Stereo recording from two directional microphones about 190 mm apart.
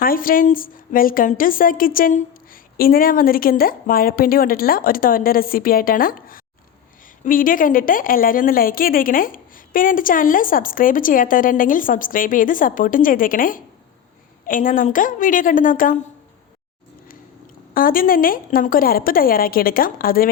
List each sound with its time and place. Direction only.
0.0 s a woman's voice: 50° left (ahead or behind)
17.7 s a woman's voice: 50° left (ahead or behind)